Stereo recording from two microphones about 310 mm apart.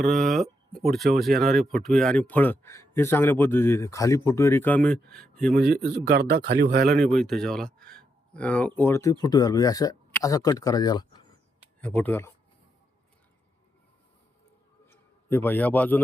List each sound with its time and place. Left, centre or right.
0.0 s speech: centre
5.6 s speech: right
6.9 s speech: centre
14.8 s a sound: centre